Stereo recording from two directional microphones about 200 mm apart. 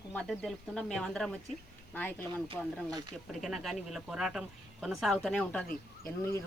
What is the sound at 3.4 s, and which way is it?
Speech, centre (ahead or behind).